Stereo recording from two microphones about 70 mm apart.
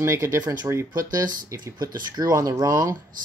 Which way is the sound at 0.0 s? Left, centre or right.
Right.